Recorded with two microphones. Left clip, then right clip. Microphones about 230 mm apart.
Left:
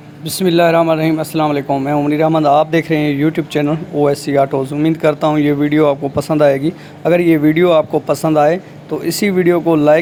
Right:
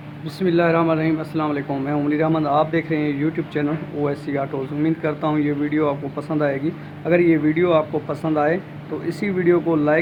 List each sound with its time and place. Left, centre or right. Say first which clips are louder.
0.3 s speech: left 7 dB; left